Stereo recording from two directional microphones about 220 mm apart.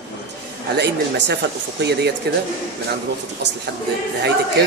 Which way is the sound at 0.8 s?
50° right (ahead or behind).